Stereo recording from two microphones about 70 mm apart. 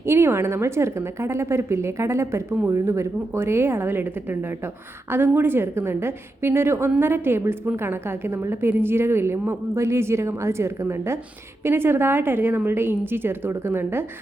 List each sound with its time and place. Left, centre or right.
0.0 s a woman's voice: right